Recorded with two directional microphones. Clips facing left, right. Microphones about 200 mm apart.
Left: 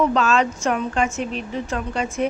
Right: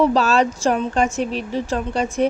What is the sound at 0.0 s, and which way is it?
Speech, 35° right (ahead or behind).